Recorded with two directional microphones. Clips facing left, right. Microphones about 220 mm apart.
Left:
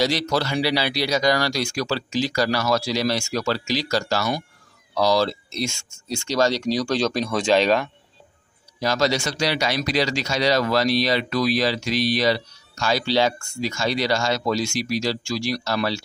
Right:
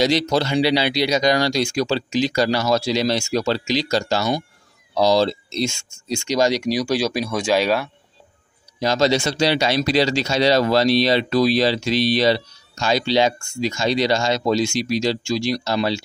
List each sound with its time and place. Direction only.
0.0 s speech: 20° right (ahead or behind)
8.7 s speech: 25° right (ahead or behind)